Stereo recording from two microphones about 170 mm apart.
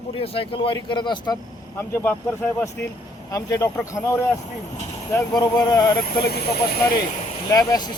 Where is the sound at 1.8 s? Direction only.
10° left (ahead or behind).